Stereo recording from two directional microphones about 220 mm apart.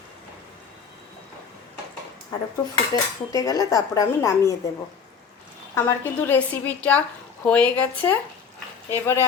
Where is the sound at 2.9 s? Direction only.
15° left (ahead or behind).